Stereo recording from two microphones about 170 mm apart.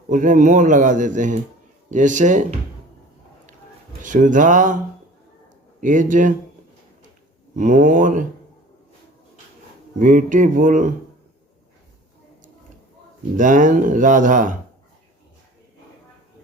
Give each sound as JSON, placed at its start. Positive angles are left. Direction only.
{"t": 0.1, "sound": "a man's voice", "side_deg": -50}
{"t": 4.0, "sound": "a man's voice", "side_deg": -50}
{"t": 5.8, "sound": "a man's voice", "side_deg": -50}
{"t": 7.5, "sound": "a man's voice", "side_deg": -50}
{"t": 10.0, "sound": "a man's voice", "side_deg": -50}
{"t": 13.3, "sound": "a man's voice", "side_deg": -50}